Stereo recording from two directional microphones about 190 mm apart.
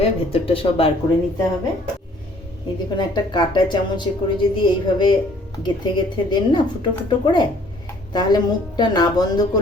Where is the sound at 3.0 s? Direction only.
25° left (ahead or behind).